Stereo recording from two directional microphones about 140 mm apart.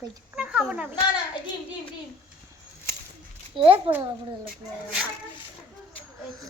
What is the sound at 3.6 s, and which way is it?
Speech, 40° right (ahead or behind).